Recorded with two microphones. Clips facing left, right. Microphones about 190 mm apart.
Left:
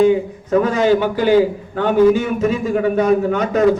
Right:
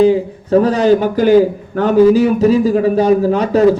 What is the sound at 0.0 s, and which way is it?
A man's voice, 35° right (ahead or behind).